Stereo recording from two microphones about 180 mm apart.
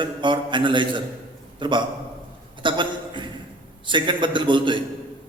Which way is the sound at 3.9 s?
25° right (ahead or behind).